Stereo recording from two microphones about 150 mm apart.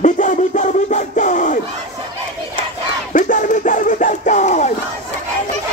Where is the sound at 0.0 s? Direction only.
55° left (ahead or behind).